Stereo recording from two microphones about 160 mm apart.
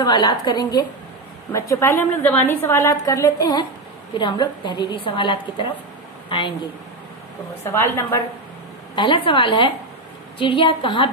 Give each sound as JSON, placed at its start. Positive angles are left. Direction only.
{"t": 0.0, "sound": "a woman's voice", "side_deg": 25}
{"t": 7.6, "sound": "a woman's voice", "side_deg": 15}
{"t": 8.9, "sound": "a woman's voice", "side_deg": 30}